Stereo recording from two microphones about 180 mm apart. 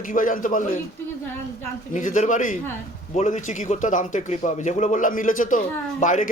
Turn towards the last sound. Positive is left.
turn(degrees=45)  # may be behind; listen again after turning